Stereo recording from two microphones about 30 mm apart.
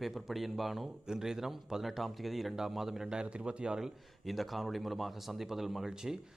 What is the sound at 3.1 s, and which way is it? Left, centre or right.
Speech, right.